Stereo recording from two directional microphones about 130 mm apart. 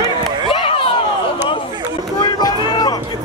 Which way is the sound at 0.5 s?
45° left (ahead or behind).